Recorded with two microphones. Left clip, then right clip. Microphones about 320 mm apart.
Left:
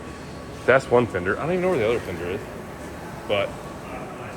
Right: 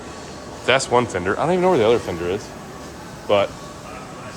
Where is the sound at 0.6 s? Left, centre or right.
Centre.